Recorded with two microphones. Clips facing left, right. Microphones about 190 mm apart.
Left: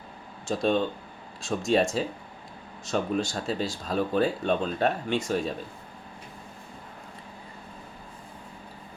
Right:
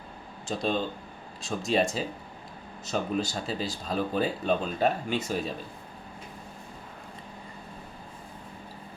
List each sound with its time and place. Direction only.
0.4 s speech: centre (ahead or behind)